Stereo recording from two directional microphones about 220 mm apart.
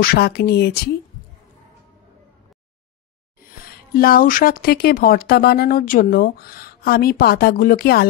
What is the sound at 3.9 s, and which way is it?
A woman's voice, 40° left (ahead or behind).